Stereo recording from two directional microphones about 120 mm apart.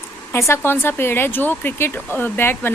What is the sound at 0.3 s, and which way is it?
Speech, 20° left (ahead or behind).